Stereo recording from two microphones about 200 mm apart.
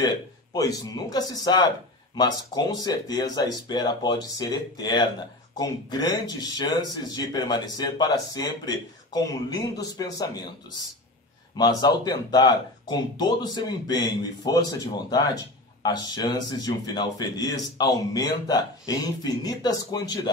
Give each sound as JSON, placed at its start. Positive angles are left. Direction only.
{"t": 0.0, "sound": "speech", "side_deg": 20}
{"t": 11.5, "sound": "speech", "side_deg": 20}